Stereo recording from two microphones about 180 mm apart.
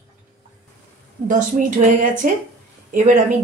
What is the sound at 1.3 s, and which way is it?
Speech, 45° right (ahead or behind).